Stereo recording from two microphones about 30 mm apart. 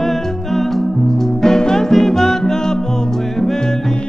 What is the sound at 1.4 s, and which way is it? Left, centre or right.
Music, centre.